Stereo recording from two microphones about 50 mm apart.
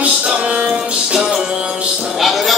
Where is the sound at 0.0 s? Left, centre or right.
Right.